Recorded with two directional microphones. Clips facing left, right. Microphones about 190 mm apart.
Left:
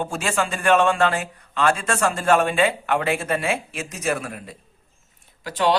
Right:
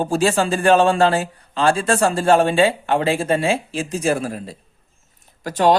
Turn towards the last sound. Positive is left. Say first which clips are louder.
# right 5 dB
turn(degrees=-45)  # may be behind; listen again after turning